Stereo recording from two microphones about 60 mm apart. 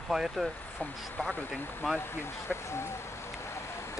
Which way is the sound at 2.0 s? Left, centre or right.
Left.